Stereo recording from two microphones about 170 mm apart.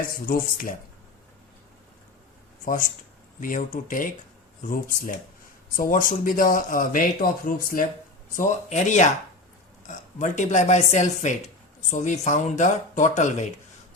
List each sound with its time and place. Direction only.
0.3 s speech: 55° left (ahead or behind)
2.6 s speech: 55° left (ahead or behind)